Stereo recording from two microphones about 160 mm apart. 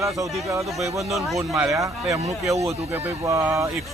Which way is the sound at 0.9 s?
Centre (ahead or behind).